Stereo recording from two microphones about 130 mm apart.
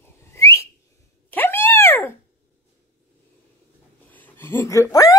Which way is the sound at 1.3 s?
15° left (ahead or behind).